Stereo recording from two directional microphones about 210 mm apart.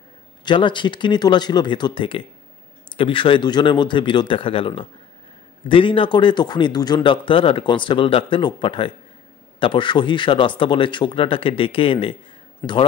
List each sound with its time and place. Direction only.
0.5 s a man's voice: 20° left (ahead or behind)
12.6 s a man's voice: 10° left (ahead or behind)